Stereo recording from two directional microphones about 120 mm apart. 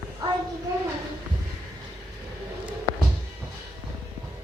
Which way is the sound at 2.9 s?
35° left (ahead or behind).